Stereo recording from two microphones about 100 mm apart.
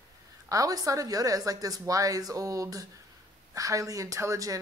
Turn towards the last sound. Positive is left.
turn(degrees=-30)  # may be behind; listen again after turning